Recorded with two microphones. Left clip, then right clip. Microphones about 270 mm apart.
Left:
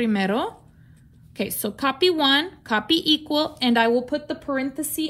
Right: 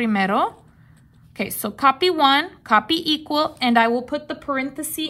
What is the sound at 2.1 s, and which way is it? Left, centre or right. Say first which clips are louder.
Speech: right 3 dB; right.